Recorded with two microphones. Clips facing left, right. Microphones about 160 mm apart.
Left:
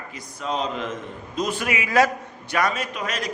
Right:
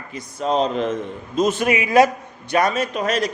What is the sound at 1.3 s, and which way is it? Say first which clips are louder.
A man's voice: right 7 dB; 25° right (ahead or behind).